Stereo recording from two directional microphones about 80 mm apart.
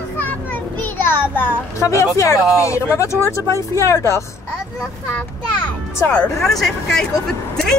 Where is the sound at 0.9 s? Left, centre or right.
Left.